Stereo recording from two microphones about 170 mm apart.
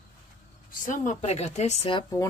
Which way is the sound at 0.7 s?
50° left (ahead or behind).